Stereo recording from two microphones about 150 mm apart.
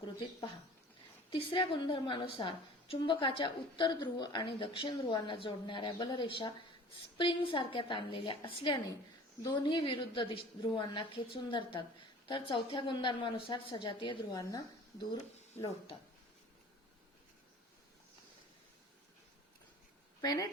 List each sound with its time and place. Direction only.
1.3 s a woman's voice: 35° left (ahead or behind)
20.2 s a woman's voice: 25° left (ahead or behind)